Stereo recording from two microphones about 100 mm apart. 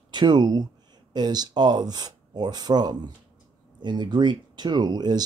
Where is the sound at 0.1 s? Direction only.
50° right (ahead or behind).